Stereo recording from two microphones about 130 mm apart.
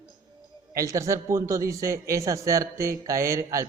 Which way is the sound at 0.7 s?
25° right (ahead or behind).